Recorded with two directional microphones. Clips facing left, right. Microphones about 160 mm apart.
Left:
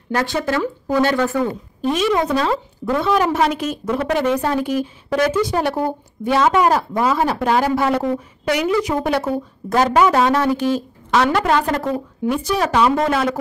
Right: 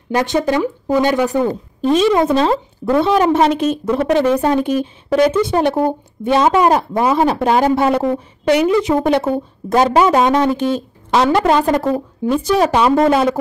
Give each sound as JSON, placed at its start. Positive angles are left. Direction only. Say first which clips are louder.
{"t": 0.1, "sound": "speech", "louder": "right 4 dB", "side_deg": -15}
{"t": 1.4, "sound": "speech", "louder": "right 3 dB", "side_deg": -30}